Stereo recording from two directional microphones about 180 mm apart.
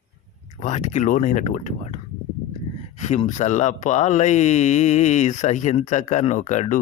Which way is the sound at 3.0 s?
40° left (ahead or behind).